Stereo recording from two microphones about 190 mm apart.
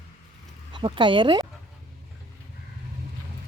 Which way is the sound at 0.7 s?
25° right (ahead or behind).